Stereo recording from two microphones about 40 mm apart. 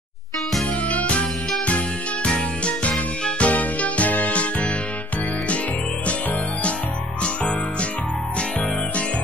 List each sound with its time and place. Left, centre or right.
0.8 s music: left
2.2 s music: left